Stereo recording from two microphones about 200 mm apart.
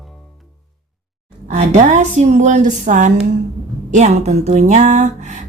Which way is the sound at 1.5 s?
35° right (ahead or behind).